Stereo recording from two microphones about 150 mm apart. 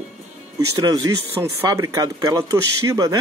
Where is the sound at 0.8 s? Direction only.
25° right (ahead or behind).